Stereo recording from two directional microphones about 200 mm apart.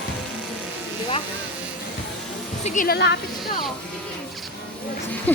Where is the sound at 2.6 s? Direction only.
35° left (ahead or behind).